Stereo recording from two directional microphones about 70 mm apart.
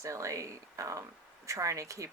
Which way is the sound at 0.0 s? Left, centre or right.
Right.